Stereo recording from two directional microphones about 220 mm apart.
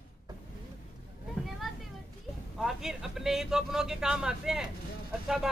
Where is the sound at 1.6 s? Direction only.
Centre (ahead or behind).